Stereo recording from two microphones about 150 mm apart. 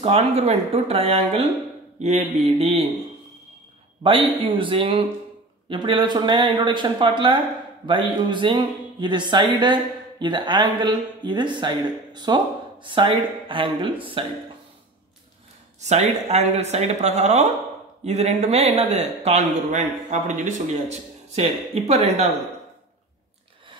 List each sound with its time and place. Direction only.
0.0 s speech: 40° right (ahead or behind)
4.0 s speech: 35° right (ahead or behind)
15.8 s speech: 45° right (ahead or behind)